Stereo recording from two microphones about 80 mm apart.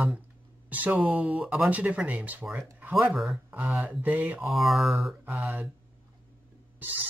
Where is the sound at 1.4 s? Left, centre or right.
Centre.